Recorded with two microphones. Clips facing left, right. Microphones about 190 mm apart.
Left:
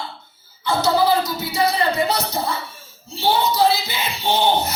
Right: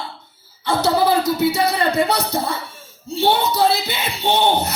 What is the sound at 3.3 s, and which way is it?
Speech, 65° right (ahead or behind).